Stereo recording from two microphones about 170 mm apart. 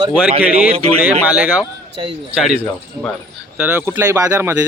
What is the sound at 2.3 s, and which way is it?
Speech, 5° right (ahead or behind).